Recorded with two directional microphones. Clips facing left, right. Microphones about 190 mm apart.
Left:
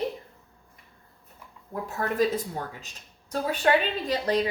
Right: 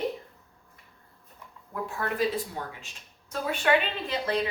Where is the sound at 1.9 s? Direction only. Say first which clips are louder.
Left 3 dB; 45° left (ahead or behind).